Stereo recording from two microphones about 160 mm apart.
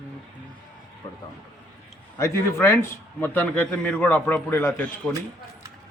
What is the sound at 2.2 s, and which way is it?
A man's voice, 15° left (ahead or behind).